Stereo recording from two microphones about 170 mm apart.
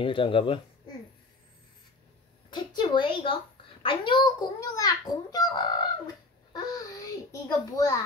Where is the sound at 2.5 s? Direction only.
25° left (ahead or behind).